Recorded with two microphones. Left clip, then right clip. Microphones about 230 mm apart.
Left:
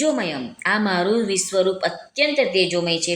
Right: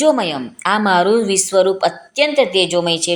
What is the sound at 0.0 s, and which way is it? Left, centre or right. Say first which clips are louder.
A woman's voice: right 7 dB; centre.